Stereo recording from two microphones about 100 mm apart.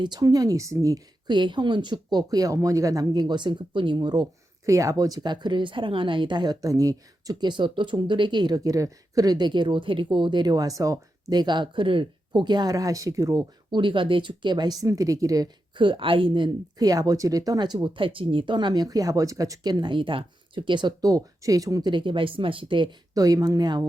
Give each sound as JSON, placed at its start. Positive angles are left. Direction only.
{"t": 0.0, "sound": "speech", "side_deg": -45}
{"t": 1.3, "sound": "a woman's voice", "side_deg": -50}
{"t": 4.6, "sound": "a woman's voice", "side_deg": -35}
{"t": 13.7, "sound": "a woman's voice", "side_deg": -50}
{"t": 15.7, "sound": "speech", "side_deg": -55}
{"t": 16.8, "sound": "a woman's voice", "side_deg": -35}
{"t": 23.1, "sound": "speech", "side_deg": -35}